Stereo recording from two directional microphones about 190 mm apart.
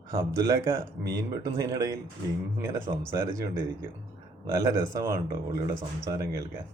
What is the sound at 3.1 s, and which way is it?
Speech, 20° right (ahead or behind).